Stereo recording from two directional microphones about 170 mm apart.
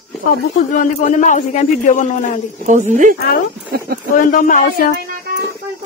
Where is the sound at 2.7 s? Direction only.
45° right (ahead or behind).